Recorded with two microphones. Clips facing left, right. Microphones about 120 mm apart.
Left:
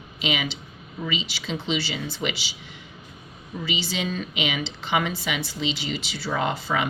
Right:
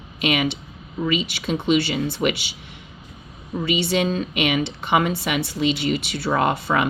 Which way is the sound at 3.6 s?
60° right (ahead or behind).